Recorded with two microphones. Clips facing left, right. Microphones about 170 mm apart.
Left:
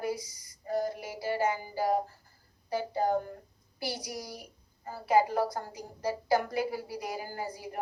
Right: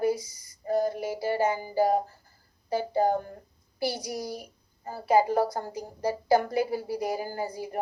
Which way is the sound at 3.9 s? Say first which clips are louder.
Right 5 dB; 25° right (ahead or behind).